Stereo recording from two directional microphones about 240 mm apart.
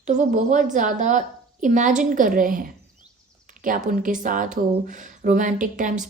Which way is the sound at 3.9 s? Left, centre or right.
Right.